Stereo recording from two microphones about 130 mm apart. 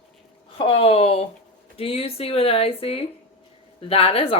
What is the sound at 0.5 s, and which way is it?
Speech, 45° left (ahead or behind).